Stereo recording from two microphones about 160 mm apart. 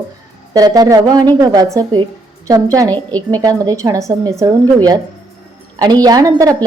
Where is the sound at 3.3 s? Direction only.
20° right (ahead or behind).